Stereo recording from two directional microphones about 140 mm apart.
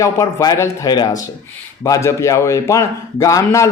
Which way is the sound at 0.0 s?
20° left (ahead or behind).